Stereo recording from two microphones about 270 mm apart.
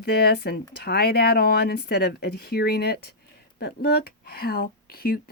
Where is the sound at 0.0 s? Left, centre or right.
Left.